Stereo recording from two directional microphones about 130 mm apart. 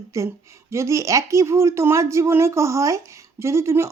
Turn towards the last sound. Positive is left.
turn(degrees=-20)  # may be behind; listen again after turning